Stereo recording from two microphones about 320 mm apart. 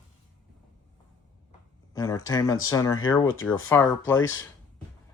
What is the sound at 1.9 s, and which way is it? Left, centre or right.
Speech, centre.